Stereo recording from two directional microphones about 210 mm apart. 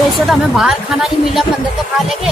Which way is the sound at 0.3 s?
Centre (ahead or behind).